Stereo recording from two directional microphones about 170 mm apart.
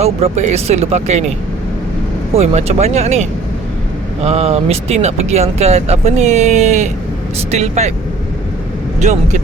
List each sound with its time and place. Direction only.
0.0 s speech: 40° right (ahead or behind)
2.3 s speech: 40° right (ahead or behind)
9.0 s speech: 45° right (ahead or behind)